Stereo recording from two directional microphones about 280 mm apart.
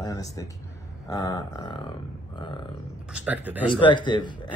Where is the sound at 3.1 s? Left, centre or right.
Centre.